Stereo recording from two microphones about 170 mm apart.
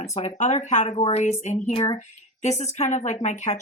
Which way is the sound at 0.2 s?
40° left (ahead or behind).